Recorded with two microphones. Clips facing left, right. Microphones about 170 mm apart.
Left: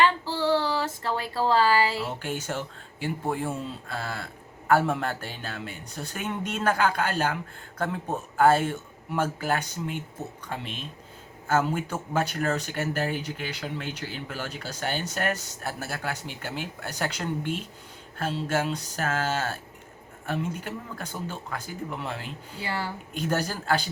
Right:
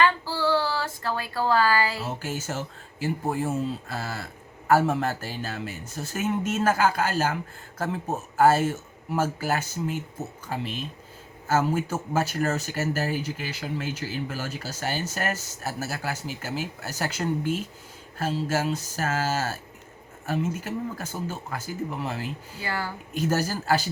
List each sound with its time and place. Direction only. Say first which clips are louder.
0.0 s child singing: even; 25° left (ahead or behind)
2.0 s speech: even; 5° right (ahead or behind)
22.6 s speech: right 1 dB; 25° left (ahead or behind)
23.1 s speech: right 3 dB; 5° right (ahead or behind)